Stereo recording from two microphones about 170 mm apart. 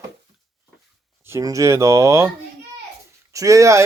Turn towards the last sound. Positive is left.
turn(degrees=-20)  # may be behind; listen again after turning